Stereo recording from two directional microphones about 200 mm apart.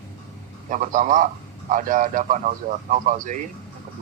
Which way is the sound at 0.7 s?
40° right (ahead or behind).